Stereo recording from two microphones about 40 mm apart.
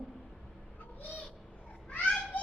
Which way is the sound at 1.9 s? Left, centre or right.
Left.